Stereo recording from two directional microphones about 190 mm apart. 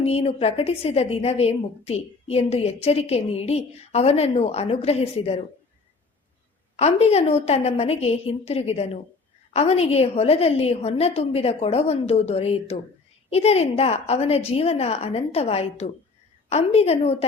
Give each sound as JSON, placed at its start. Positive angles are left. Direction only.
{"t": 0.0, "sound": "a woman's voice", "side_deg": 35}
{"t": 6.7, "sound": "a woman's voice", "side_deg": 35}